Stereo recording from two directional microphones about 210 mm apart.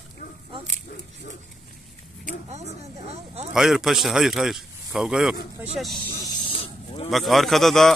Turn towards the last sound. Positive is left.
turn(degrees=0)  # may be behind; listen again after turning